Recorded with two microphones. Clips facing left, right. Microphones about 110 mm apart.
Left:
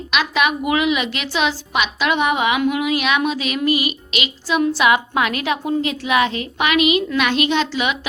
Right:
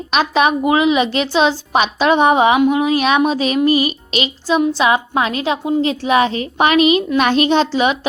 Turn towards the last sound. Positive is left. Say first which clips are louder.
# right 5 dB
turn(degrees=-35)  # may be behind; listen again after turning